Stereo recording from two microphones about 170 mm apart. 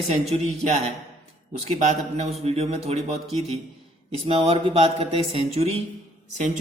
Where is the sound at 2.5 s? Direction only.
35° right (ahead or behind).